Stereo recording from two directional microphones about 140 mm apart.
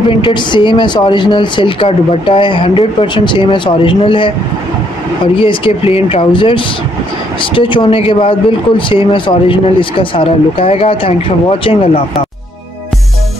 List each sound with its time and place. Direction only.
0.2 s speech: 35° left (ahead or behind)